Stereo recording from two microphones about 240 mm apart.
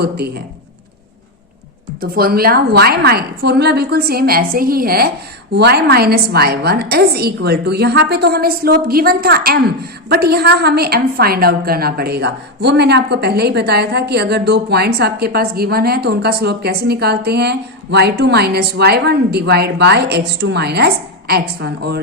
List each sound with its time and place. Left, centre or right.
0.0 s a woman's voice: right
2.0 s a woman's voice: right